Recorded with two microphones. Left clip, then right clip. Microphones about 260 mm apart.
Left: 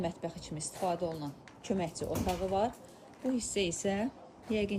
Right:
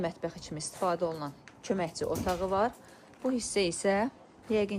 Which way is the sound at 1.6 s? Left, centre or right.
Right.